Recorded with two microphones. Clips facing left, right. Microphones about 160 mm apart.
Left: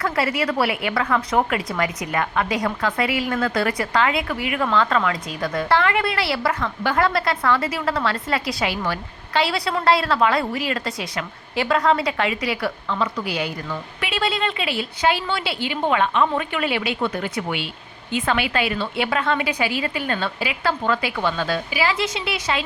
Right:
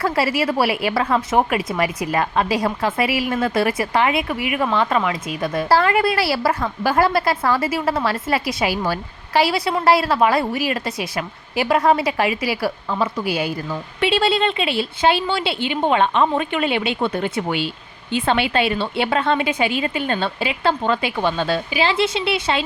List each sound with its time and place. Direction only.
0.0 s a woman's voice: 25° right (ahead or behind)
5.4 s a woman's voice: 30° right (ahead or behind)